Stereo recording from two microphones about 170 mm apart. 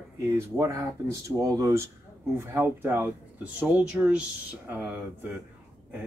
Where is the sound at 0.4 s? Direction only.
20° right (ahead or behind).